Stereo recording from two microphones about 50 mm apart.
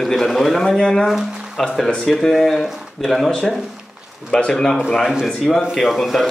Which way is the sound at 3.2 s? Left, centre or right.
Centre.